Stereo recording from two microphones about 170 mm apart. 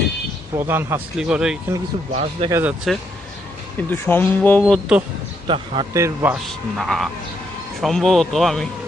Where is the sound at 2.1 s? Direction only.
40° right (ahead or behind).